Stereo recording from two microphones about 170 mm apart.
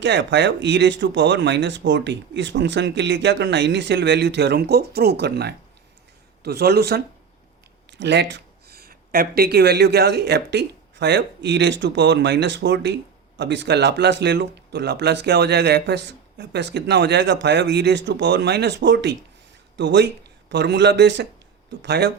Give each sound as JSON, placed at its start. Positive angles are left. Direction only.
{"t": 0.0, "sound": "speech", "side_deg": -90}
{"t": 7.9, "sound": "speech", "side_deg": -90}